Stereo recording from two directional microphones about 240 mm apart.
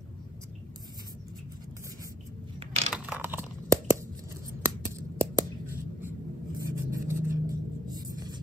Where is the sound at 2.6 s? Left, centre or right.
Right.